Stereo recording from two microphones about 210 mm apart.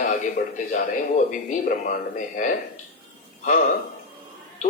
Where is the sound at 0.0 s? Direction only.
35° left (ahead or behind).